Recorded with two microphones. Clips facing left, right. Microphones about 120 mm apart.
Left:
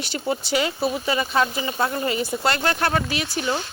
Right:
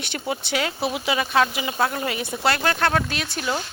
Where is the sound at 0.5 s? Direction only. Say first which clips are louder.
Left 2 dB; centre (ahead or behind).